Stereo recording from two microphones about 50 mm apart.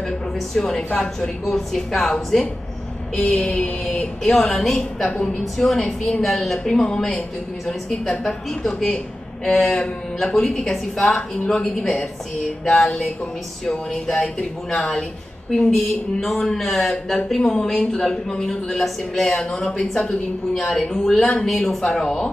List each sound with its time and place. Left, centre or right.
0.6 s speech: centre
3.9 s a woman's voice: centre